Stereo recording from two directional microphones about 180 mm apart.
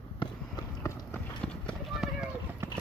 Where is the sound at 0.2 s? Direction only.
25° left (ahead or behind).